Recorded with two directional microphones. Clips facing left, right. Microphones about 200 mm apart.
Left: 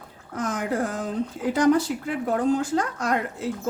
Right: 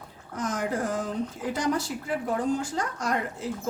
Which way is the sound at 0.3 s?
55° left (ahead or behind).